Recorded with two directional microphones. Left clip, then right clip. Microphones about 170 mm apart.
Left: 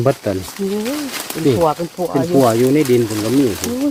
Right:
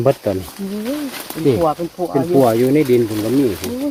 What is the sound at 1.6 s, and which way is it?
Speech, 70° left (ahead or behind).